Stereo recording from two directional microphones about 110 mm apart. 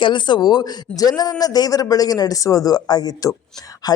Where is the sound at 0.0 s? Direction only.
45° left (ahead or behind).